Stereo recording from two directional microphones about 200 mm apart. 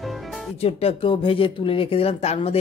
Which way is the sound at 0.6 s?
30° left (ahead or behind).